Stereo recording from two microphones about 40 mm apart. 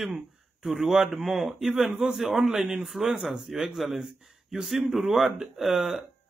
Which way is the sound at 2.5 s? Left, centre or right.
Centre.